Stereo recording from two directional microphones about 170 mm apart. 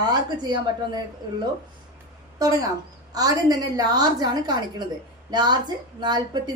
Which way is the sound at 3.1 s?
20° right (ahead or behind).